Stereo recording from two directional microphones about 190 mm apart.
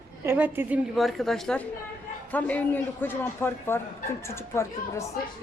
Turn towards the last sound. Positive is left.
turn(degrees=15)  # may be behind; listen again after turning